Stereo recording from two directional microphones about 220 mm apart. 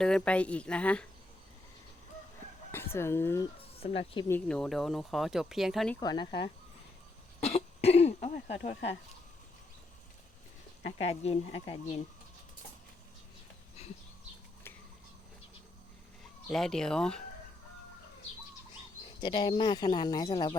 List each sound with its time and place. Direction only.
0.0 s speech: 5° left (ahead or behind)
2.7 s speech: 10° left (ahead or behind)
3.8 s speech: 25° left (ahead or behind)
4.3 s speech: 5° left (ahead or behind)
6.0 s speech: 20° left (ahead or behind)
11.1 s speech: 30° left (ahead or behind)
13.8 s a sound: 30° left (ahead or behind)
16.5 s speech: centre (ahead or behind)
19.2 s speech: 20° left (ahead or behind)